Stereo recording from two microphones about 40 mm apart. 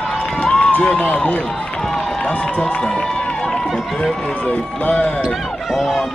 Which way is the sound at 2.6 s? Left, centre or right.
Left.